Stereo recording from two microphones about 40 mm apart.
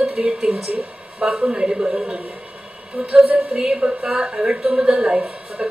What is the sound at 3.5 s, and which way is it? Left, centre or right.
A man's voice, right.